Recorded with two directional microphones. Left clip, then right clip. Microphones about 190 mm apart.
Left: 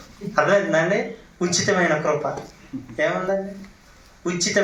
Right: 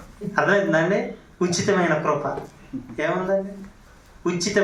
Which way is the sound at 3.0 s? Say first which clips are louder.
Left 2 dB; 40° left (ahead or behind).